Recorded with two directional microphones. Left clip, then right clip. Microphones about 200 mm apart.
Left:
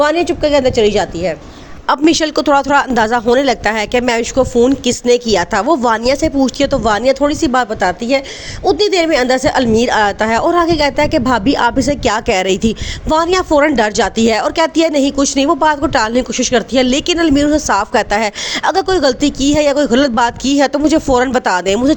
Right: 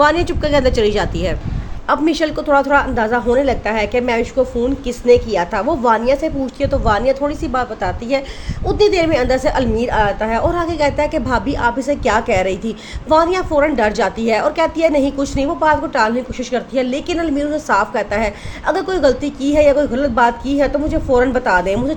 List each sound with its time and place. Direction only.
0.0 s a woman's voice: 20° left (ahead or behind)
1.9 s a woman's voice: 45° left (ahead or behind)
10.5 s speech: 35° left (ahead or behind)